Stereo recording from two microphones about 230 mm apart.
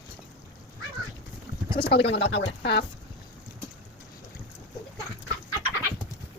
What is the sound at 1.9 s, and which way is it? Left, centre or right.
Speech, left.